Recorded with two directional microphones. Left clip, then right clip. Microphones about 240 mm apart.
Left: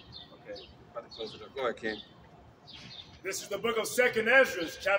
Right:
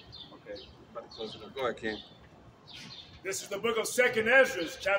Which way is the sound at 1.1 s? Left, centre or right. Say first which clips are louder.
Right 1 dB; centre.